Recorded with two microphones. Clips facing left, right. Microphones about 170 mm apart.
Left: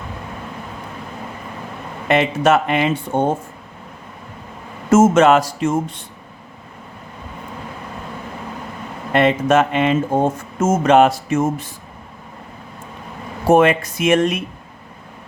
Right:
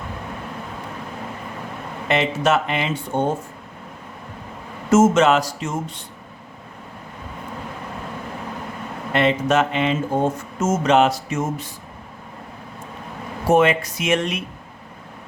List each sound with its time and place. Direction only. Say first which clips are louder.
2.0 s speech: left 4 dB; 50° left (ahead or behind)
4.9 s speech: left 3 dB; 50° left (ahead or behind)
9.1 s speech: left 4 dB; 50° left (ahead or behind)
13.5 s speech: left 3 dB; 50° left (ahead or behind)